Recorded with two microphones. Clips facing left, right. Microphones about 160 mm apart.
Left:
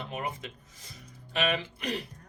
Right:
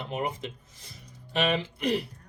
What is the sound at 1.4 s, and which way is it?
Speech, 25° right (ahead or behind).